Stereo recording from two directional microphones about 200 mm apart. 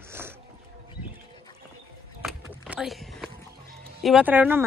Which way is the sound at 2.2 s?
5° right (ahead or behind).